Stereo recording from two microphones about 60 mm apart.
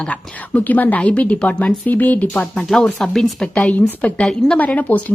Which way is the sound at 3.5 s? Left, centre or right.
Left.